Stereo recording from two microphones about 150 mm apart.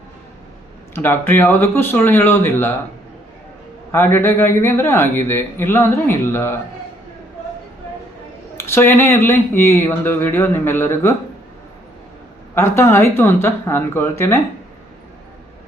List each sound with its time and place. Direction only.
0.9 s a man's voice: 15° left (ahead or behind)
3.9 s a man's voice: 15° left (ahead or behind)
8.5 s a man's voice: 15° left (ahead or behind)
12.5 s a man's voice: 15° left (ahead or behind)